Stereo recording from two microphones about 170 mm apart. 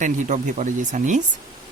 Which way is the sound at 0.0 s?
45° right (ahead or behind).